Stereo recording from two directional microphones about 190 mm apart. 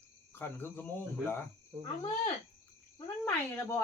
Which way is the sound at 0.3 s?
10° left (ahead or behind).